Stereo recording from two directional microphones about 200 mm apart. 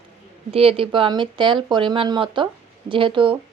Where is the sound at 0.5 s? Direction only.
30° right (ahead or behind).